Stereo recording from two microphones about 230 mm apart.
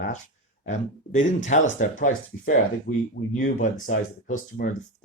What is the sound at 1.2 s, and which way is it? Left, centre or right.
Speech, left.